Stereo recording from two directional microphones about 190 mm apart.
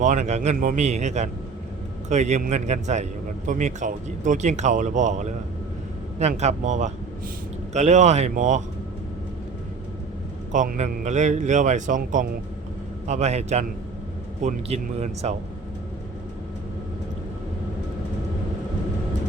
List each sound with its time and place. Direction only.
0.0 s a man's voice: 40° right (ahead or behind)
10.5 s a man's voice: 40° right (ahead or behind)